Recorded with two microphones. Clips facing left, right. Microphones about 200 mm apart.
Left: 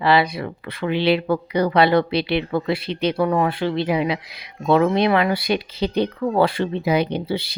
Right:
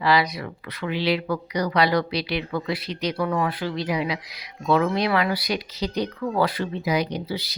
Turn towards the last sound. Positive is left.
turn(degrees=25)  # may be behind; listen again after turning